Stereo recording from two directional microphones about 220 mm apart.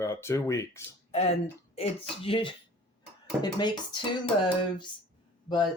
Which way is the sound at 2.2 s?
25° left (ahead or behind).